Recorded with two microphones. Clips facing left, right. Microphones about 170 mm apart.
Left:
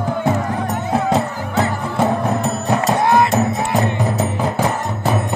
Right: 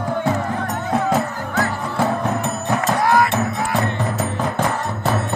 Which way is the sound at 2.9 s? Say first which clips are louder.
Left 2 dB; 25° left (ahead or behind).